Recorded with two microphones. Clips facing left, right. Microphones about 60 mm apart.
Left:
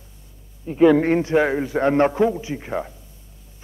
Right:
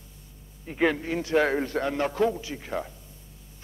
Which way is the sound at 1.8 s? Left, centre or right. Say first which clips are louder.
Left 9 dB; left.